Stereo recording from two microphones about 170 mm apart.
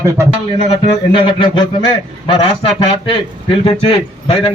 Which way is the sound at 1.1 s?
30° left (ahead or behind).